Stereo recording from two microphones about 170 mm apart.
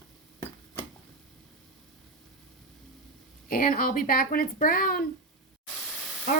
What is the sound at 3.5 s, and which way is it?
Speech, 55° left (ahead or behind).